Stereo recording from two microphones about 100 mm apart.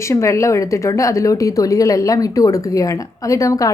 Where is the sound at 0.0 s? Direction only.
30° left (ahead or behind).